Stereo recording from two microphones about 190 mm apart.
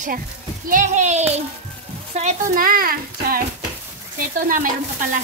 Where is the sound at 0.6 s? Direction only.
40° right (ahead or behind).